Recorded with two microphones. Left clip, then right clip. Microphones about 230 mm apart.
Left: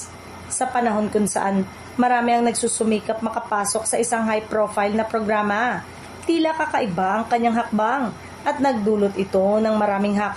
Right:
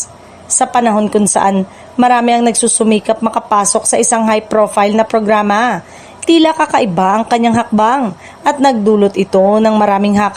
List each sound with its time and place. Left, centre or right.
0.6 s speech: right